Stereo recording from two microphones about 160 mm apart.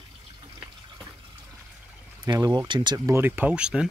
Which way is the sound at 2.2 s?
25° right (ahead or behind).